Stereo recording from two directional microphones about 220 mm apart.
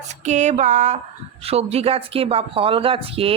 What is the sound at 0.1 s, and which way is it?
Speech, 30° right (ahead or behind).